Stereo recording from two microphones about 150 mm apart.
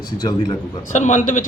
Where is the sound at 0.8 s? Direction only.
55° left (ahead or behind).